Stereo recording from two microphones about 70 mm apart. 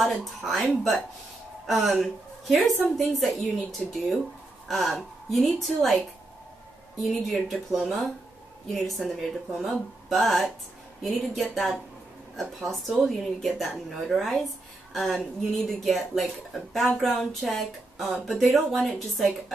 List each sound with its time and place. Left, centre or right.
0.0 s speech: centre
7.0 s speech: centre